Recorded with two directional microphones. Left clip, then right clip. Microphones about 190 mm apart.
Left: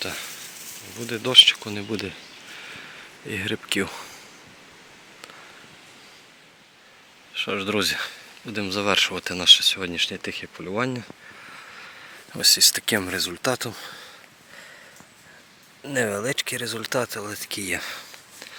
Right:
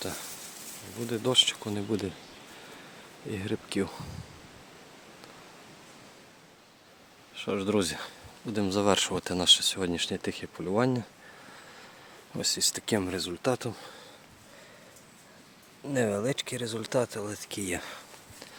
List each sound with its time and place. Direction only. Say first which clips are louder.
1.0 s speech: left 10 dB; 10° right (ahead or behind)
3.2 s speech: left 8 dB; centre (ahead or behind)
7.3 s speech: left 4 dB; 10° right (ahead or behind)
12.3 s speech: left 12 dB; 5° right (ahead or behind)
15.8 s speech: left 4 dB; 5° right (ahead or behind)